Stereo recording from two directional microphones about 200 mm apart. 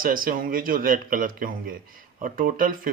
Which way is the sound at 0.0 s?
45° right (ahead or behind).